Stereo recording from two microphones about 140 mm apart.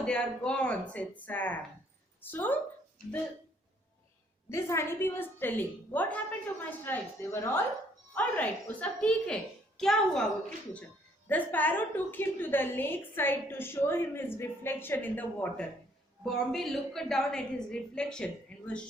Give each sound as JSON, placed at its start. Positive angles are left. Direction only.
{"t": 0.0, "sound": "a woman's voice", "side_deg": 5}
{"t": 4.4, "sound": "a woman's voice", "side_deg": 20}
{"t": 11.3, "sound": "a woman's voice", "side_deg": 10}
{"t": 16.2, "sound": "a woman's voice", "side_deg": 0}